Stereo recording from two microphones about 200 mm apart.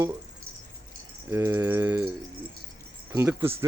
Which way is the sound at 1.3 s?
15° right (ahead or behind).